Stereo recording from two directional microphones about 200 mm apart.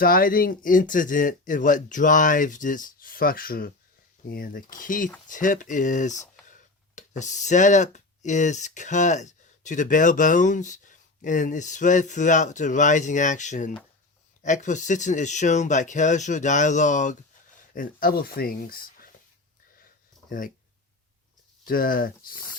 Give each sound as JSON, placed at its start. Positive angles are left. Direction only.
{"t": 0.0, "sound": "speech", "side_deg": 45}
{"t": 21.6, "sound": "speech", "side_deg": 45}